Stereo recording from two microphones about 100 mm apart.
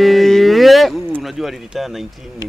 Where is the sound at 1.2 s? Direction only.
Centre (ahead or behind).